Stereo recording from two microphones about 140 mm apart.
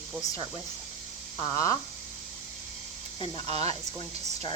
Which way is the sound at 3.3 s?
45° right (ahead or behind).